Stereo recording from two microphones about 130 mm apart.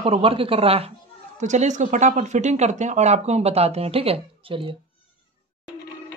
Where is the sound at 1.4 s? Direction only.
65° right (ahead or behind); by 4.7 s 45° right (ahead or behind).